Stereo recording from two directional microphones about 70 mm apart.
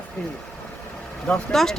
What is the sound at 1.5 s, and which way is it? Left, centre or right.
Speech, centre.